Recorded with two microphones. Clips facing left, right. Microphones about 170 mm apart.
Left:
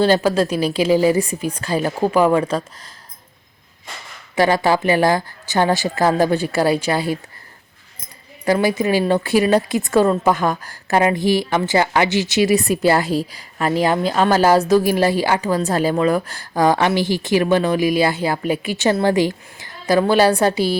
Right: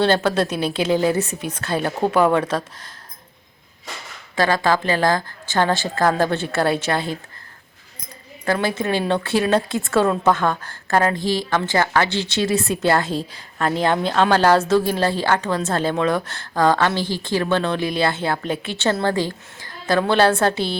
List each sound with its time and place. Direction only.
0.0 s a woman's voice: 10° left (ahead or behind)
4.4 s a woman's voice: 15° left (ahead or behind)
8.4 s a woman's voice: 10° left (ahead or behind)
12.4 s a woman's voice: centre (ahead or behind)